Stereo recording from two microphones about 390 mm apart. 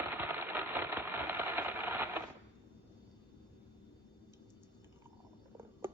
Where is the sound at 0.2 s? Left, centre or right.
Centre.